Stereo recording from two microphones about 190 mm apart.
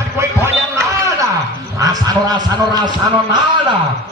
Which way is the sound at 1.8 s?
20° right (ahead or behind).